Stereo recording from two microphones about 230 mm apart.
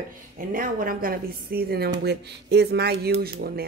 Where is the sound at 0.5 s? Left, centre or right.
Right.